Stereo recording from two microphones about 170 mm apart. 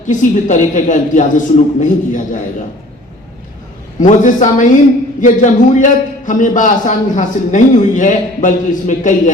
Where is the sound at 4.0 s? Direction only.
45° left (ahead or behind).